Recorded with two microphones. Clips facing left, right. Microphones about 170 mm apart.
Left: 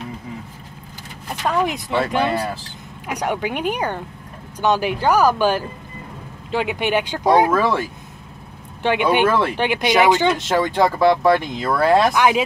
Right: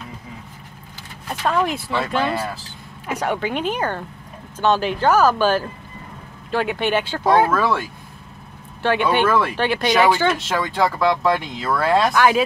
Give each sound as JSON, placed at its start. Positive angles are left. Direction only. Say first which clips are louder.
{"t": 1.4, "sound": "speech", "louder": "even", "side_deg": 15}
{"t": 8.8, "sound": "speech", "louder": "left 1 dB", "side_deg": 15}